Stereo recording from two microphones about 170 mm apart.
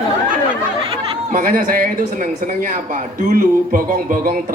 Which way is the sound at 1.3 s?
55° right (ahead or behind).